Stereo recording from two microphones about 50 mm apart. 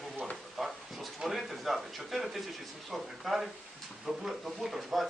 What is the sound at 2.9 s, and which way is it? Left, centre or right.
Speech, centre.